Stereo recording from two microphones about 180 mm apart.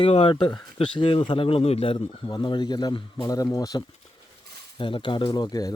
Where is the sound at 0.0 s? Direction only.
30° left (ahead or behind).